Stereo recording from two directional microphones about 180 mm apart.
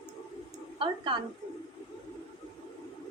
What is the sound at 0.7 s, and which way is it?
Speech, 30° right (ahead or behind).